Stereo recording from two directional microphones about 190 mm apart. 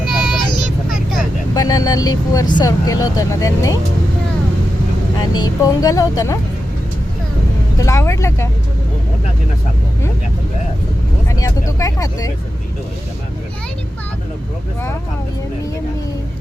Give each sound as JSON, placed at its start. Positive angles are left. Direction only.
{"t": 0.1, "sound": "child singing", "side_deg": 0}
{"t": 1.5, "sound": "speech", "side_deg": 20}
{"t": 5.2, "sound": "speech", "side_deg": 20}
{"t": 7.8, "sound": "speech", "side_deg": 15}
{"t": 11.3, "sound": "vehicle", "side_deg": 20}
{"t": 11.8, "sound": "speech", "side_deg": 15}